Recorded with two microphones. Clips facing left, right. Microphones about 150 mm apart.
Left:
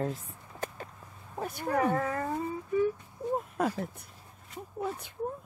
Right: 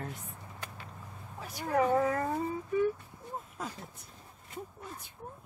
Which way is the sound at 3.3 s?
60° left (ahead or behind).